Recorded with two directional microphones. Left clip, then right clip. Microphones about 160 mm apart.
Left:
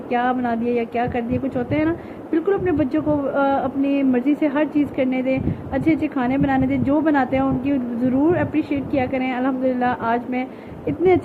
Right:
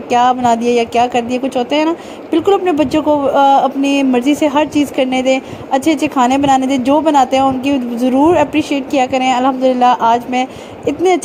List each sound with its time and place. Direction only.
0.1 s a woman's voice: 35° right (ahead or behind)